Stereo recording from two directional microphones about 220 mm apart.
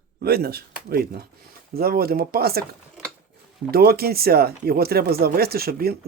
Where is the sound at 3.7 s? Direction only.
45° right (ahead or behind).